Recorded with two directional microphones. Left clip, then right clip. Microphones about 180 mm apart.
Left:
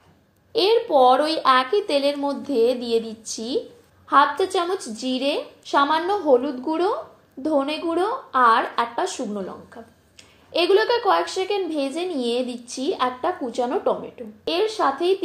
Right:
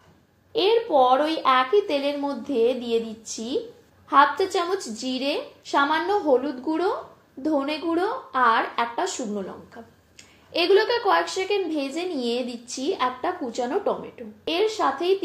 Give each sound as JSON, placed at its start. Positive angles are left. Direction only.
{"t": 0.5, "sound": "a woman's voice", "side_deg": 35}